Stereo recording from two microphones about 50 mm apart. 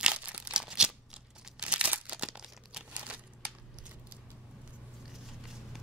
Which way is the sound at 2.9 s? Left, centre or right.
Right.